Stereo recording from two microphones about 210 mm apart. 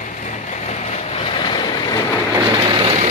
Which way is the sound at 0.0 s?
35° left (ahead or behind).